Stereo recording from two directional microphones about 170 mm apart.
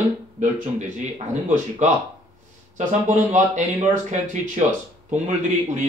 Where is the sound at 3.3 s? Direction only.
45° right (ahead or behind).